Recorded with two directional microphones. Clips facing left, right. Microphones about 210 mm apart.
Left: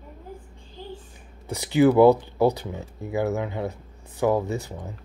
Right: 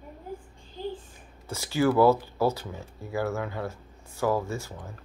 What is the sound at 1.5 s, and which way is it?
Speech, 15° left (ahead or behind).